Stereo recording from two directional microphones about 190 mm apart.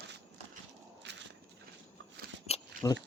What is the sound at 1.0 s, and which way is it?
Horse, 65° right (ahead or behind).